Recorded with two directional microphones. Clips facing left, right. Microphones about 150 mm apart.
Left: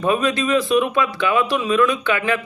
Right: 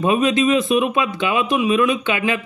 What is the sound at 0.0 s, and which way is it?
A man's voice, 20° right (ahead or behind).